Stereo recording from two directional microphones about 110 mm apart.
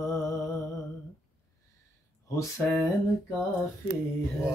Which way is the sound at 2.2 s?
30° left (ahead or behind).